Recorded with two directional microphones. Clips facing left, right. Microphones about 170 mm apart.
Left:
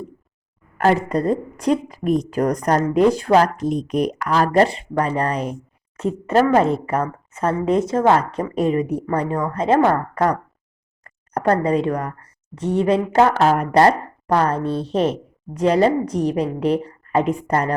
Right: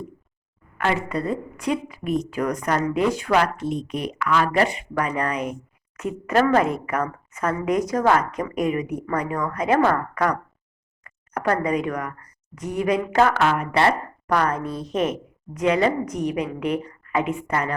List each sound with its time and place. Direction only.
0.8 s a woman's voice: 40° left (ahead or behind)
13.5 s speech: 40° left (ahead or behind)
14.3 s speech: 30° left (ahead or behind)